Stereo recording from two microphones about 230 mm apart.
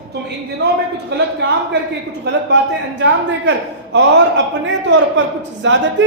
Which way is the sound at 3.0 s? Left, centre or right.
Right.